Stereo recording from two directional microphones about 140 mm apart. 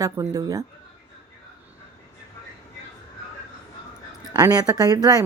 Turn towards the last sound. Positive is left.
turn(degrees=-25)  # may be behind; listen again after turning